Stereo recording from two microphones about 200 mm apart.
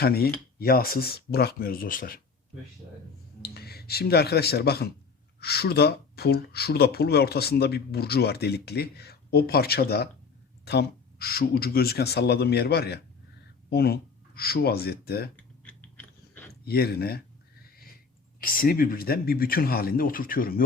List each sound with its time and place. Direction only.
0.0 s speech: 50° left (ahead or behind)
3.4 s speech: 50° left (ahead or behind)
15.6 s biting: 5° left (ahead or behind)
16.6 s speech: 50° left (ahead or behind)
18.3 s speech: 45° left (ahead or behind)